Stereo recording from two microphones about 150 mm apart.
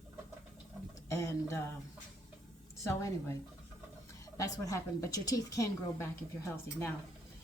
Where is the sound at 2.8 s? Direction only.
20° left (ahead or behind).